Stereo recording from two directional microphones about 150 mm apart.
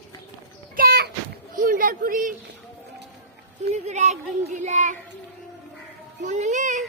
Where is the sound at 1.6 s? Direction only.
65° right (ahead or behind).